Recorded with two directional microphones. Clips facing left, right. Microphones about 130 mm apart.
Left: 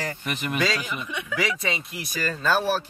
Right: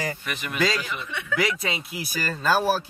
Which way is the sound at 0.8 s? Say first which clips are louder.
Left 1 dB; 15° left (ahead or behind).